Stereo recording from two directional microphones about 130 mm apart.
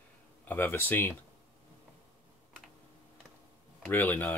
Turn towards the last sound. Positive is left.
turn(degrees=15)  # may be behind; listen again after turning